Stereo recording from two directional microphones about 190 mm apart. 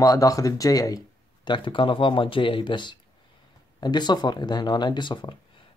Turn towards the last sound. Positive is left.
turn(degrees=25)  # may be behind; listen again after turning